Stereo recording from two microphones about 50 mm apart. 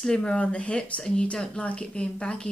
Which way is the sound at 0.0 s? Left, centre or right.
Centre.